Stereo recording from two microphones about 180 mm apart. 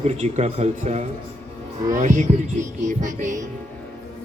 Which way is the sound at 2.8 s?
45° right (ahead or behind).